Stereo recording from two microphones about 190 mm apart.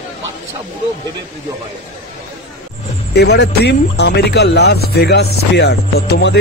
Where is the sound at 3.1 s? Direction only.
60° left (ahead or behind).